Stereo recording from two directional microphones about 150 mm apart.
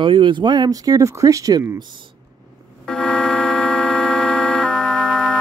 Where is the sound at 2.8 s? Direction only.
5° left (ahead or behind).